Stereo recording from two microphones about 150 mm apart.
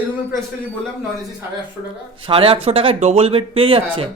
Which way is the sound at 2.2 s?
35° right (ahead or behind).